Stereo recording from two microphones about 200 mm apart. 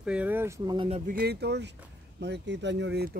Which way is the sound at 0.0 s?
5° right (ahead or behind).